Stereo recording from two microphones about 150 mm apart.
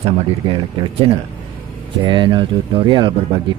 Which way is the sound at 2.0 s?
30° right (ahead or behind).